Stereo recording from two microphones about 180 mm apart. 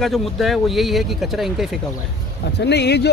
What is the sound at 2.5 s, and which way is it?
Speech, 70° left (ahead or behind).